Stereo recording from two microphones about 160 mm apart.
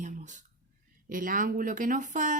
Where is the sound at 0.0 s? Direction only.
50° right (ahead or behind).